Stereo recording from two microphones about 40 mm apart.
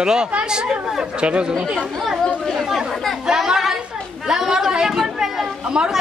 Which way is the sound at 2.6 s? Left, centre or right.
Centre.